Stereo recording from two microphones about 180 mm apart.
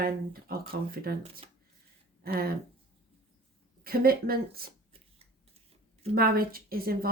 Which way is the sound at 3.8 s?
55° right (ahead or behind).